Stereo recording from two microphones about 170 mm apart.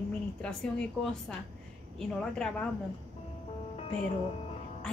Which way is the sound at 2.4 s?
5° left (ahead or behind).